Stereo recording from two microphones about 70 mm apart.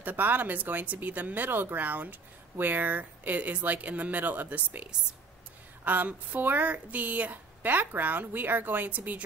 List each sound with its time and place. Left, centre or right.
0.0 s speech: right
5.9 s speech: right